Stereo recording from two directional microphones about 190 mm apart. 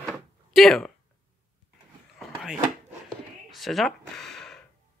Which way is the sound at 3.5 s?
Centre (ahead or behind).